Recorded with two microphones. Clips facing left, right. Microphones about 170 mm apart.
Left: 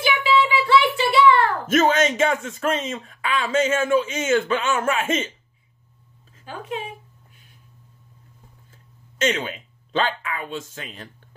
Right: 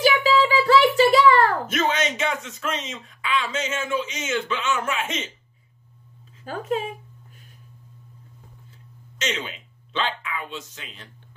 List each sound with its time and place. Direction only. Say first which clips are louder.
0.0 s child singing: right 1 dB; 40° right (ahead or behind)
1.7 s speech: left 6 dB; 45° left (ahead or behind)
6.4 s speech: right 5 dB; 40° right (ahead or behind)
9.2 s speech: left 6 dB; 50° left (ahead or behind)